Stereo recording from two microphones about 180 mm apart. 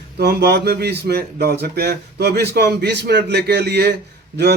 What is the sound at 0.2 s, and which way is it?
A man's voice, 65° right (ahead or behind).